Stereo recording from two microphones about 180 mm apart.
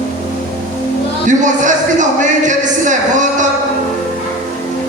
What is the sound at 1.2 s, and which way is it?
Speech, 45° right (ahead or behind).